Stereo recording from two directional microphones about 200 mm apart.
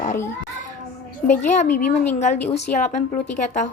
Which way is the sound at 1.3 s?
40° left (ahead or behind).